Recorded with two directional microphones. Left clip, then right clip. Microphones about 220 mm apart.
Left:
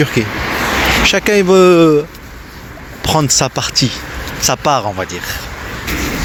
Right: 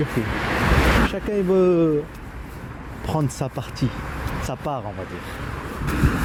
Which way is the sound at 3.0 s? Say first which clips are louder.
Left 13 dB; 10° left (ahead or behind).